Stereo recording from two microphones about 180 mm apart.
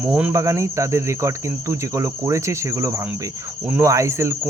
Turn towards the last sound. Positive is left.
turn(degrees=-15)  # may be behind; listen again after turning